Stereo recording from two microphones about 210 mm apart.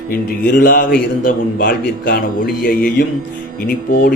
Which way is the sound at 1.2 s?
40° left (ahead or behind).